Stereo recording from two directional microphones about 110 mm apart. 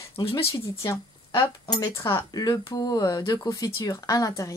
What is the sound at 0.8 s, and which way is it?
A woman's voice, 25° left (ahead or behind).